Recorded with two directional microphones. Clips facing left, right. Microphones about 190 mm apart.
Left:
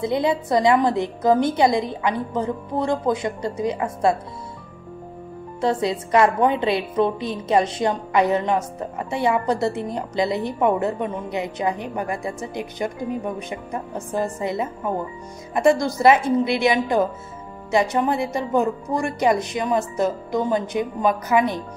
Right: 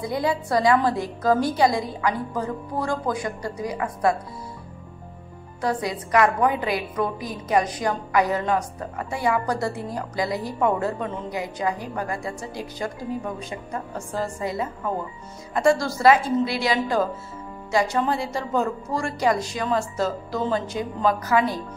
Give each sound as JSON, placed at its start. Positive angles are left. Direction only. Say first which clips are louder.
{"t": 0.0, "sound": "a woman's voice", "louder": "left 4 dB", "side_deg": 20}
{"t": 5.6, "sound": "a woman's voice", "louder": "left 4 dB", "side_deg": 25}